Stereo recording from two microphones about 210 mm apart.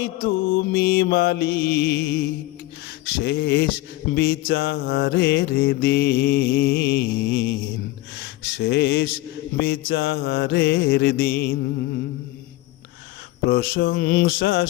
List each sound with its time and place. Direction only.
0.0 s mantra: 45° left (ahead or behind)
8.2 s a sound: 50° left (ahead or behind)
9.6 s mantra: 50° left (ahead or behind)
13.5 s mantra: 45° left (ahead or behind)